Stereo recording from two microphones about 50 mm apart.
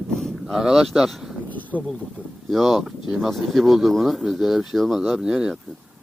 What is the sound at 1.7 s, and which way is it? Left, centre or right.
Speech, right.